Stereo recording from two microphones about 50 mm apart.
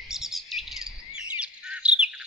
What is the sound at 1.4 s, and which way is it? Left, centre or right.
Bird, centre.